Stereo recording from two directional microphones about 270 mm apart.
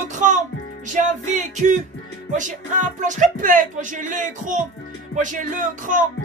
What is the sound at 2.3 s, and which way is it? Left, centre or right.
Speech, right.